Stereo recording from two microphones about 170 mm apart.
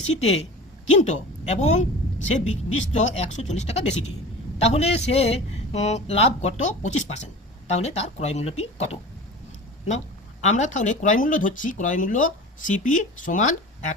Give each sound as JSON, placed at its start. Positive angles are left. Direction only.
{"t": 0.2, "sound": "speech", "side_deg": 40}
{"t": 10.4, "sound": "speech", "side_deg": 45}